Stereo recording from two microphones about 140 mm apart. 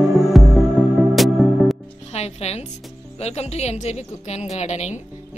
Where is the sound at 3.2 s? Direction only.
50° left (ahead or behind).